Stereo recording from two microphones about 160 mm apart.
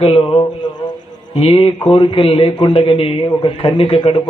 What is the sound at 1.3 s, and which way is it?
A man's voice, 35° left (ahead or behind).